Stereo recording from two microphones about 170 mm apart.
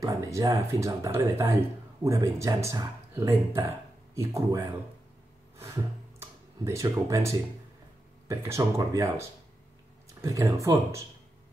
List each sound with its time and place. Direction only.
0.0 s speech: 20° right (ahead or behind)
6.6 s speech: 15° right (ahead or behind)
10.2 s speech: 20° right (ahead or behind)